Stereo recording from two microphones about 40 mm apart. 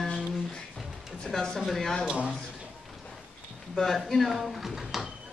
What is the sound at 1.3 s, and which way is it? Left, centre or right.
Speech, centre.